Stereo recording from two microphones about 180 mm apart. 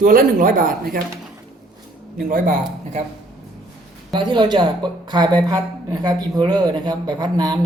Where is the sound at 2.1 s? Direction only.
50° right (ahead or behind).